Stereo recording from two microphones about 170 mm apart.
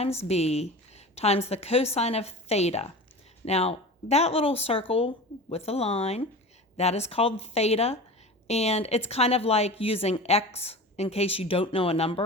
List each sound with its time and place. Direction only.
0.3 s speech: 40° left (ahead or behind)